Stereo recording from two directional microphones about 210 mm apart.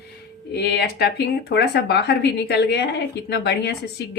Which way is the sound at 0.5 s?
50° left (ahead or behind).